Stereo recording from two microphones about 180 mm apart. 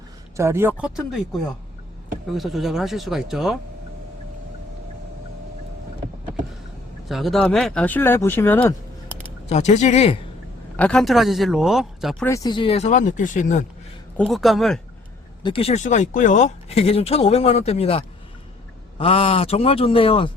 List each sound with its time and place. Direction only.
0.3 s speech: 15° right (ahead or behind)
7.1 s speech: centre (ahead or behind)
9.5 s speech: 40° left (ahead or behind)
10.8 s speech: 5° left (ahead or behind)
12.2 s speech: 20° left (ahead or behind); by 13.7 s 45° left (ahead or behind)
14.2 s speech: centre (ahead or behind)
15.4 s speech: 30° left (ahead or behind)